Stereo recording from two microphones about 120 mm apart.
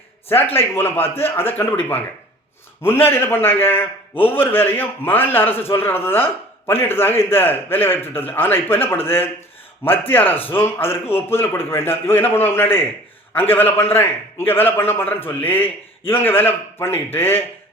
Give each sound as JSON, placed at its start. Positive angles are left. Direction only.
{"t": 0.5, "sound": "a man's voice", "side_deg": 20}